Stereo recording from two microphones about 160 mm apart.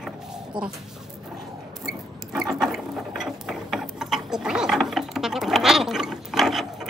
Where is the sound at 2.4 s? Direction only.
Centre (ahead or behind).